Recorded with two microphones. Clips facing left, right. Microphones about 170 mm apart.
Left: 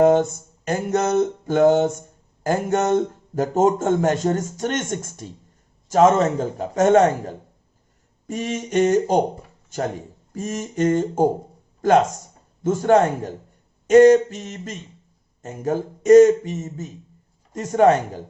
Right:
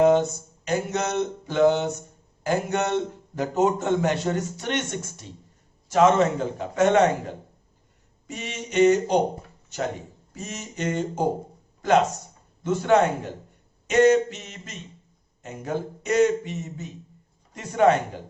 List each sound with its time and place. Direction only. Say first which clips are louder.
0.0 s a man's voice: left 3 dB; 50° left (ahead or behind)
10.3 s a man's voice: left 9 dB; 50° left (ahead or behind)
12.6 s a man's voice: left 3 dB; 45° left (ahead or behind)